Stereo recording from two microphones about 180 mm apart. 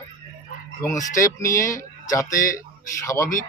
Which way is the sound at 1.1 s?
15° left (ahead or behind).